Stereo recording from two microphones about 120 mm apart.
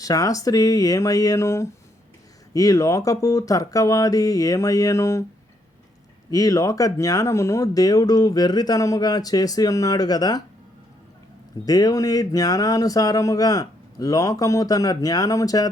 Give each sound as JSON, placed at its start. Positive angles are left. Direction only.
{"t": 0.0, "sound": "speech", "side_deg": 30}
{"t": 6.3, "sound": "speech", "side_deg": 30}
{"t": 11.6, "sound": "speech", "side_deg": 30}